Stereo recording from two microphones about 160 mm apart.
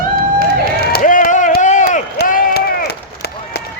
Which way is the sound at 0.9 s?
60° left (ahead or behind).